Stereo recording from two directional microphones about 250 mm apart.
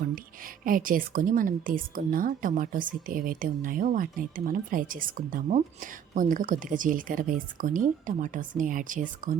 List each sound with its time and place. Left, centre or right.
0.4 s a woman's voice: right